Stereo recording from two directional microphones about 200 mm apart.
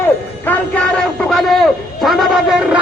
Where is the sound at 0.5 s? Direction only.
10° left (ahead or behind).